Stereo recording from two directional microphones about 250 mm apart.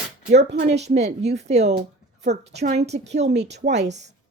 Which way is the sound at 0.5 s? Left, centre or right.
Right.